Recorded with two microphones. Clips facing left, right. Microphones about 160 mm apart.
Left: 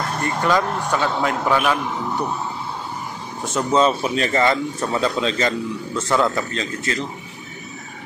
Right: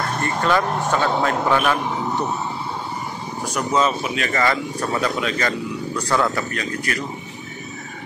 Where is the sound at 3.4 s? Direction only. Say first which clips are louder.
Left 3 dB; 25° left (ahead or behind).